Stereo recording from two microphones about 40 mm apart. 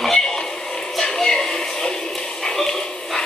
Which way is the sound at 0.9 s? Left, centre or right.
Centre.